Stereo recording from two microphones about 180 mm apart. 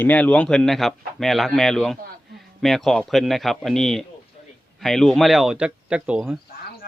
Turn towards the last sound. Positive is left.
turn(degrees=-5)  # may be behind; listen again after turning